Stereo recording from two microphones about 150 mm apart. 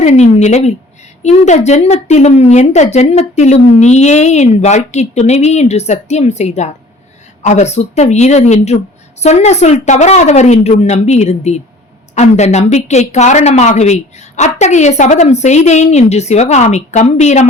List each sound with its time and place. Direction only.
0.0 s a woman's voice: 50° left (ahead or behind)